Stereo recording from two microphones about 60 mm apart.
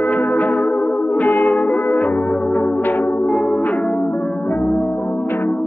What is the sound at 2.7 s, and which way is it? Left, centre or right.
Music, left.